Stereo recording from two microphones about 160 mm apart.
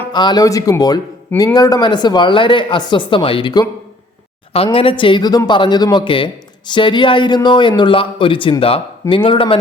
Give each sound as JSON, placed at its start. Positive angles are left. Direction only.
{"t": 0.1, "sound": "speech", "side_deg": 25}